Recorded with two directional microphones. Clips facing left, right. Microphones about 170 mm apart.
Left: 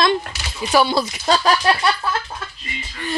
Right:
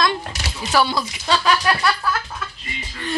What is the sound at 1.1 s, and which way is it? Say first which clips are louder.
Speech: left 2 dB; 40° left (ahead or behind).